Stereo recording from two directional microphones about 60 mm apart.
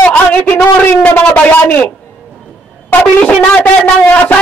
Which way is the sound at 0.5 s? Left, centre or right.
Left.